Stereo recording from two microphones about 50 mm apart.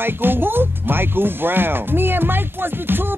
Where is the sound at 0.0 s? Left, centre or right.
Right.